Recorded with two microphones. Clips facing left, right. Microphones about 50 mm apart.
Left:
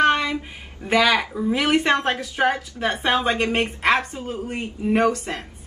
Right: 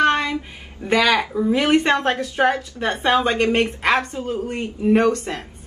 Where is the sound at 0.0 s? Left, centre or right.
Centre.